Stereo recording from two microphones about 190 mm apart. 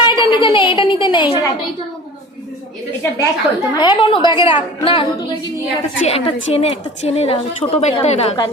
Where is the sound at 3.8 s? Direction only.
25° left (ahead or behind).